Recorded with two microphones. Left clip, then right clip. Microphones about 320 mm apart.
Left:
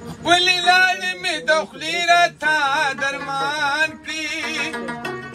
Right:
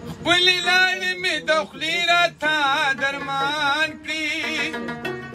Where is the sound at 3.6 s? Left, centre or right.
Centre.